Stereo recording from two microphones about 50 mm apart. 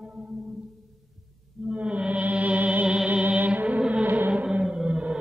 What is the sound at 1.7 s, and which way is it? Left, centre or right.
Music, right.